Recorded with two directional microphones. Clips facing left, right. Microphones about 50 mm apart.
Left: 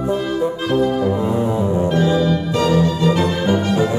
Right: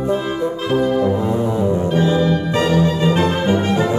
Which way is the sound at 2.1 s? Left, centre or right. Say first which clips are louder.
Even; right.